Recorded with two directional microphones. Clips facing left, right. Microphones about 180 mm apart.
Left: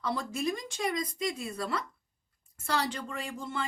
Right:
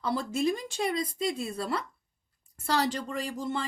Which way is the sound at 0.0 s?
30° right (ahead or behind).